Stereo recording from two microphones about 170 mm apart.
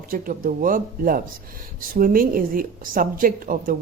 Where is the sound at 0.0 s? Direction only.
55° right (ahead or behind).